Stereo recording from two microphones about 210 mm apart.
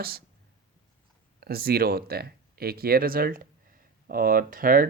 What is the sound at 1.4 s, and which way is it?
Speech, 45° right (ahead or behind).